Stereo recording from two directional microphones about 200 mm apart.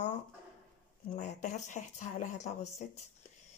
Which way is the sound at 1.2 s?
35° left (ahead or behind).